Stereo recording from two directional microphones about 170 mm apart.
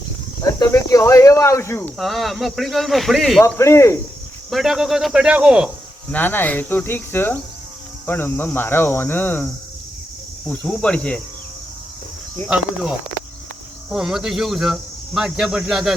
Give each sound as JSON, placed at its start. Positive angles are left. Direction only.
{"t": 0.6, "sound": "speech", "side_deg": 20}
{"t": 2.0, "sound": "speech", "side_deg": 0}
{"t": 3.4, "sound": "speech", "side_deg": 15}
{"t": 4.4, "sound": "speech", "side_deg": 0}
{"t": 6.1, "sound": "speech", "side_deg": 10}
{"t": 10.5, "sound": "speech", "side_deg": 5}
{"t": 12.5, "sound": "speech", "side_deg": -5}
{"t": 13.9, "sound": "speech", "side_deg": -5}